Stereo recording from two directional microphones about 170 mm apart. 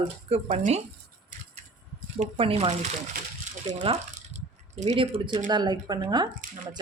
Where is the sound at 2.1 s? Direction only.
35° right (ahead or behind).